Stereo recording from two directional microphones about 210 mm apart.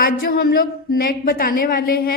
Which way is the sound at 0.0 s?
45° left (ahead or behind).